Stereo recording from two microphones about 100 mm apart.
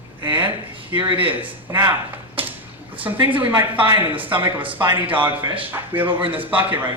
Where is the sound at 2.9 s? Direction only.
15° right (ahead or behind).